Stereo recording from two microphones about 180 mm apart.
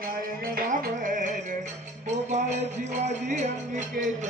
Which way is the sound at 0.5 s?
50° right (ahead or behind).